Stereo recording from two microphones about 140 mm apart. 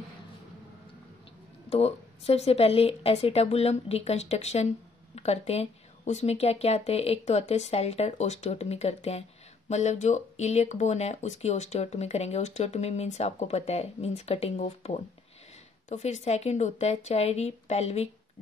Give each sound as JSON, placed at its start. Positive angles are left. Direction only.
{"t": 1.7, "sound": "speech", "side_deg": 45}